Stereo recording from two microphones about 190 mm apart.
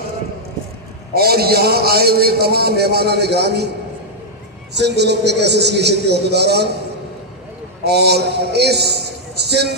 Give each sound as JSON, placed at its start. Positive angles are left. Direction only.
{"t": 1.1, "sound": "a man's voice", "side_deg": -55}
{"t": 4.7, "sound": "a man's voice", "side_deg": -65}
{"t": 7.9, "sound": "a man's voice", "side_deg": -60}